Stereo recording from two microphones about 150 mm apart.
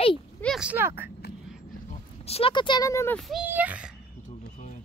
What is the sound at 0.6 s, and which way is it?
Speech, 15° right (ahead or behind).